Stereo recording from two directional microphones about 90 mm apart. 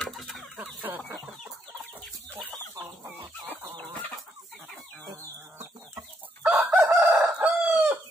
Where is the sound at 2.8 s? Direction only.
25° right (ahead or behind).